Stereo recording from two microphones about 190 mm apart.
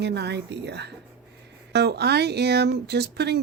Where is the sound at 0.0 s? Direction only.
60° right (ahead or behind).